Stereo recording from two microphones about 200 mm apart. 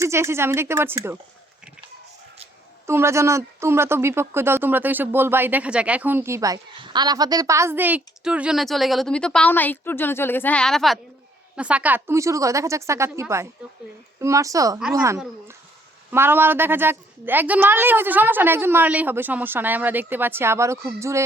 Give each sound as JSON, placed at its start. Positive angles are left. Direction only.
{"t": 0.0, "sound": "speech", "side_deg": -15}
{"t": 2.8, "sound": "speech", "side_deg": -15}
{"t": 16.1, "sound": "speech", "side_deg": -10}